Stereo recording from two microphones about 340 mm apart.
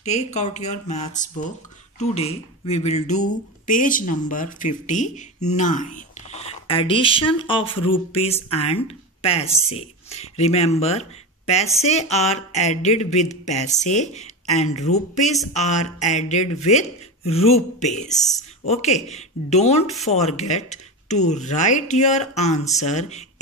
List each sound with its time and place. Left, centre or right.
0.0 s speech: centre